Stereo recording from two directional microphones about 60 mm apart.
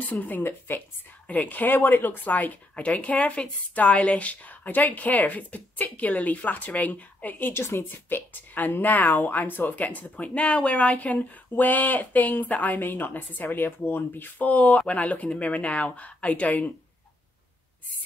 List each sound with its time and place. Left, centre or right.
0.0 s speech: left
0.4 s speech: left
10.2 s speech: centre